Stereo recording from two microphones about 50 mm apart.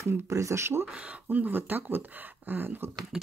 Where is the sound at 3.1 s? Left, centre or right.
Centre.